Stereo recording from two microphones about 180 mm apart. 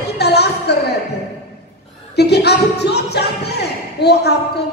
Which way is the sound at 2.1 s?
65° left (ahead or behind).